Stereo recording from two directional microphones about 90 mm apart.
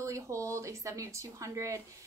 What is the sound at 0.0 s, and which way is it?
Speech, 35° right (ahead or behind).